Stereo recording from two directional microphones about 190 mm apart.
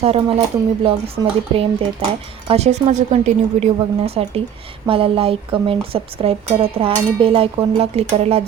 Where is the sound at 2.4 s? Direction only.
35° right (ahead or behind).